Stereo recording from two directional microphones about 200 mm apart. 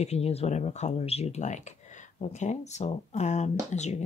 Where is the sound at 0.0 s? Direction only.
30° left (ahead or behind).